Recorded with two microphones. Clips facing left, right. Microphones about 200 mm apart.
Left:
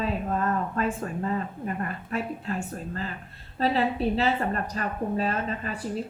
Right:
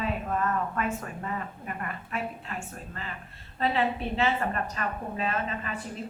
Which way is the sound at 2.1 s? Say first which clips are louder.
Left 5 dB; 35° left (ahead or behind).